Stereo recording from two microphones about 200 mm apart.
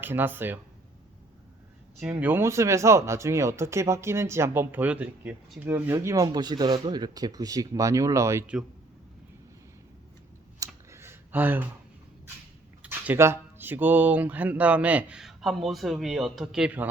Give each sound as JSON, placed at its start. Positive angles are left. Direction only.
{"t": 0.0, "sound": "speech", "side_deg": -10}
{"t": 2.0, "sound": "speech", "side_deg": -5}
{"t": 10.6, "sound": "a sound", "side_deg": -15}
{"t": 12.8, "sound": "speech", "side_deg": -10}